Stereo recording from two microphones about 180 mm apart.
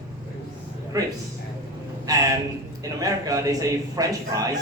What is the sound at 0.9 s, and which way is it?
Speech, 20° right (ahead or behind).